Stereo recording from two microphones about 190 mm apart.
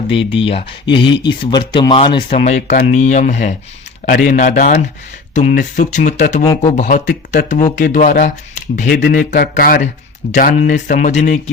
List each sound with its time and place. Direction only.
0.1 s speech: 30° left (ahead or behind)
2.4 s speech: 35° left (ahead or behind)
6.4 s speech: 20° left (ahead or behind)
6.7 s speech: 40° left (ahead or behind)
9.0 s speech: 55° left (ahead or behind); by 11.3 s 40° left (ahead or behind)